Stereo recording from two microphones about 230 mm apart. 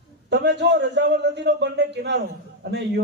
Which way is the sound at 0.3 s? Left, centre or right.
Right.